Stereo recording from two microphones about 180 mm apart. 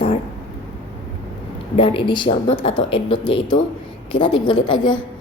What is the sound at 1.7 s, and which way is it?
A woman's voice, 30° left (ahead or behind).